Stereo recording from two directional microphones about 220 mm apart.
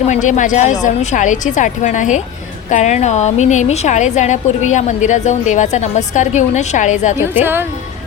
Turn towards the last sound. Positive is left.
turn(degrees=-10)  # may be behind; listen again after turning